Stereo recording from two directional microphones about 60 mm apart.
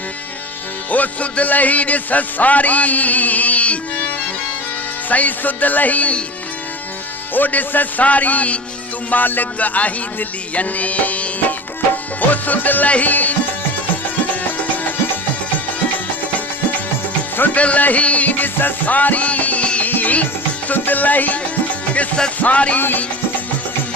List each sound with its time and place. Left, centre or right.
0.9 s a man's voice: left
5.0 s a man's voice: left
7.3 s a man's voice: left
17.3 s speech: left
17.6 s music: left
20.7 s a man's voice: left
22.8 s music: left